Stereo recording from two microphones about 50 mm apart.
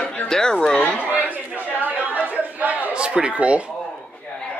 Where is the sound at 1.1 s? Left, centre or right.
Right.